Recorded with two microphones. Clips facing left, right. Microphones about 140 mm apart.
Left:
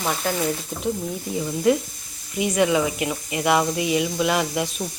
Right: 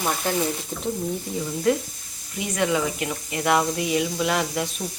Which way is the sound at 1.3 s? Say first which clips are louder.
Left 3 dB; 5° left (ahead or behind).